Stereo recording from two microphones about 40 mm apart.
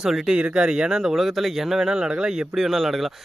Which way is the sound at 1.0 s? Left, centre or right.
Centre.